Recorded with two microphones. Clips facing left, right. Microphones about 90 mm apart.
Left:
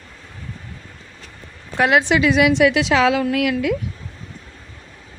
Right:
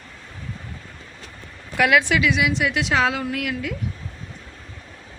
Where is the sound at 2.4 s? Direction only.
70° left (ahead or behind); by 3.8 s 90° left.